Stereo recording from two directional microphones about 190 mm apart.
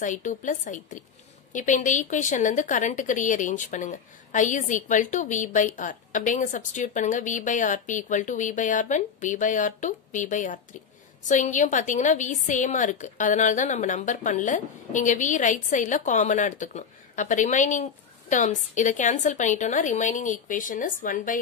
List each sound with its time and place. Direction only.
0.0 s speech: 40° left (ahead or behind)